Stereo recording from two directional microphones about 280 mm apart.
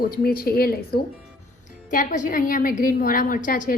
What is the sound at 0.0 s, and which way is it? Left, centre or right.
A woman's voice, left.